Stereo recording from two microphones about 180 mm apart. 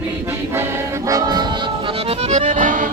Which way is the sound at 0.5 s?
15° right (ahead or behind).